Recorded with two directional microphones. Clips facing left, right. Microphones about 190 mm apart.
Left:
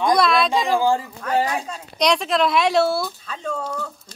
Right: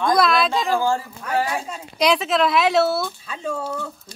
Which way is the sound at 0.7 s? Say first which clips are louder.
Left 2 dB; 15° left (ahead or behind).